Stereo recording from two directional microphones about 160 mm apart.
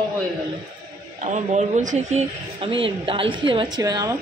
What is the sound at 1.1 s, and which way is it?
Speech, 45° right (ahead or behind).